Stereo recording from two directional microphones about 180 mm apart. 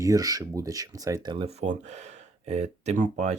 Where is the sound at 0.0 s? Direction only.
20° right (ahead or behind).